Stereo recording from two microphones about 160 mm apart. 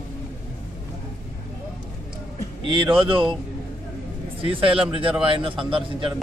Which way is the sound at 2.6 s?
30° right (ahead or behind).